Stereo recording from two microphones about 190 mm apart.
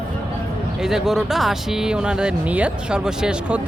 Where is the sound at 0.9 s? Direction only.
Centre (ahead or behind).